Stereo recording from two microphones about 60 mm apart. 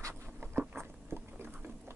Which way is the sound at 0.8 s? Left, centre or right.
Right.